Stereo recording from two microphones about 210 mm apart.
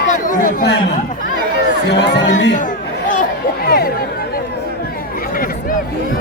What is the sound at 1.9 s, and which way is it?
Speech, 60° left (ahead or behind).